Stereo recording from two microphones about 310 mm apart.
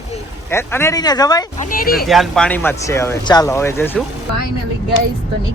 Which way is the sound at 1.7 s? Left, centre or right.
Left.